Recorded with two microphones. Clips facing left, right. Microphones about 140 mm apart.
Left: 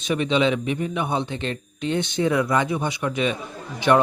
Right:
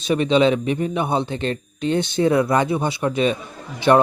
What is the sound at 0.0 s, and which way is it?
Speech, 35° right (ahead or behind).